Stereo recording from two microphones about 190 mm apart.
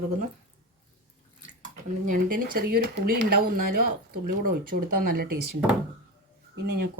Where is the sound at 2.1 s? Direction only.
50° right (ahead or behind).